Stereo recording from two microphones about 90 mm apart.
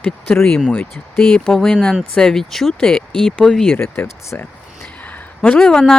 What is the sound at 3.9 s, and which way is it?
Speech, 25° left (ahead or behind).